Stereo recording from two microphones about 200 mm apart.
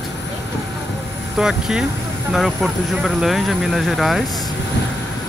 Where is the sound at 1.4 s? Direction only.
5° right (ahead or behind).